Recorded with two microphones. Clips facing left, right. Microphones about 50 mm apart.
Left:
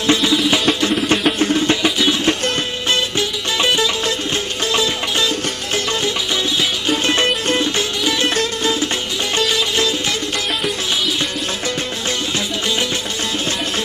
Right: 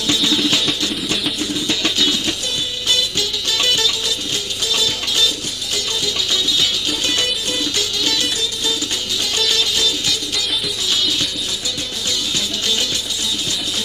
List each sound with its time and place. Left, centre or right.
0.1 s music: left
1.8 s music: centre
6.6 s music: left
8.0 s music: left
8.4 s music: left
9.4 s music: centre
9.7 s music: left